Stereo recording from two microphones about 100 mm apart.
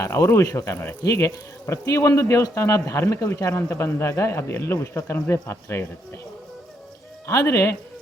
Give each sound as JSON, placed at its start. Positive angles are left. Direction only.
{"t": 0.0, "sound": "speech", "side_deg": 30}
{"t": 7.3, "sound": "speech", "side_deg": 30}